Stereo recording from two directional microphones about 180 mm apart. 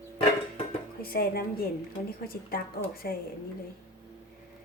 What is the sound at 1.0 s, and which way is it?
A woman's voice, 55° left (ahead or behind).